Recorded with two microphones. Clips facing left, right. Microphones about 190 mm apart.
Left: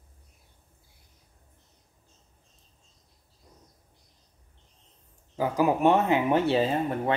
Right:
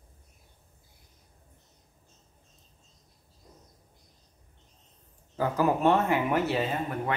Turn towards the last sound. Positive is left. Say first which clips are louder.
# left 4 dB
turn(degrees=30)  # may be behind; listen again after turning